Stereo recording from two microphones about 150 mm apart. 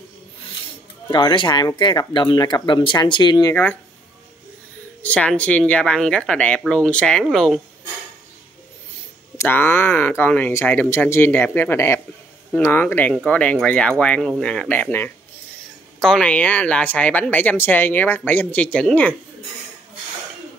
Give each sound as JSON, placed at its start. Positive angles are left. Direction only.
{"t": 1.1, "sound": "speech", "side_deg": 30}
{"t": 5.0, "sound": "speech", "side_deg": 10}
{"t": 9.4, "sound": "speech", "side_deg": 15}